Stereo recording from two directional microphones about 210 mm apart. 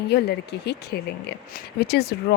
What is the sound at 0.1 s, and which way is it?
A woman's voice, 50° left (ahead or behind).